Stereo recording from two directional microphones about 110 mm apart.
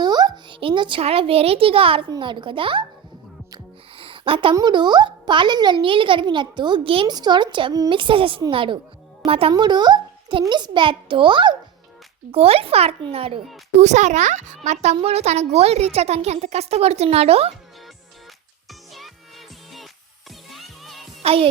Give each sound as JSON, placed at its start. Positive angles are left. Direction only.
{"t": 0.0, "sound": "a sound", "side_deg": -40}
{"t": 1.0, "sound": "a child's voice", "side_deg": -60}
{"t": 2.0, "sound": "a child's voice", "side_deg": -45}
{"t": 3.9, "sound": "a sound", "side_deg": -55}
{"t": 4.5, "sound": "a child's voice", "side_deg": -40}
{"t": 7.1, "sound": "a child's voice", "side_deg": -40}
{"t": 9.5, "sound": "a child's voice", "side_deg": -40}
{"t": 12.3, "sound": "a child's voice", "side_deg": -60}
{"t": 13.7, "sound": "a child's voice", "side_deg": -90}
{"t": 15.0, "sound": "a woman's voice", "side_deg": -75}
{"t": 18.7, "sound": "music", "side_deg": 0}
{"t": 20.5, "sound": "music", "side_deg": 0}
{"t": 21.2, "sound": "music", "side_deg": -60}